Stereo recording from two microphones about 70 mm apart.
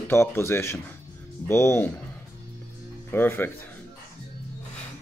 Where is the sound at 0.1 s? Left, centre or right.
Left.